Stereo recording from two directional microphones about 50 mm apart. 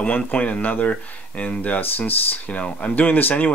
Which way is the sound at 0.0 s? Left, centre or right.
Left.